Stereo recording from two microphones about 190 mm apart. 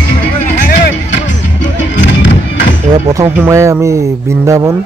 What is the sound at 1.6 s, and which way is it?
Music, 75° left (ahead or behind).